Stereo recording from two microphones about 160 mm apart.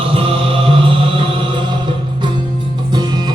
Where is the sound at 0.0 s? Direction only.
35° right (ahead or behind).